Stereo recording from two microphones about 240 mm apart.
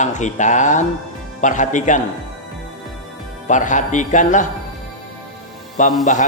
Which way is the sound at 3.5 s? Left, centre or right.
Left.